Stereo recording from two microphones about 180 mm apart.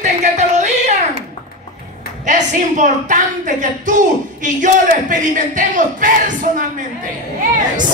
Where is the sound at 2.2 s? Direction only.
45° right (ahead or behind).